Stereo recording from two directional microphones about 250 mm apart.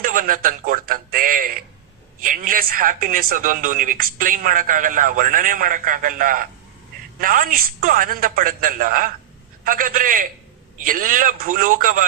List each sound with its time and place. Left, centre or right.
0.0 s speech: right